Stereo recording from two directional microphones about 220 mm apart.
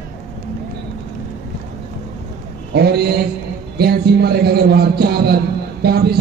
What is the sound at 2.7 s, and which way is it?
A man's voice, 50° right (ahead or behind).